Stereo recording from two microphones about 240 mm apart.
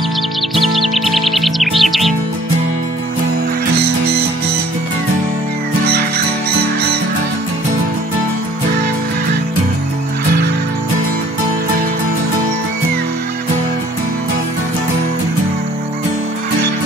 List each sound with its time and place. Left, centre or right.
0.6 s music: centre
3.7 s music: right
5.9 s music: right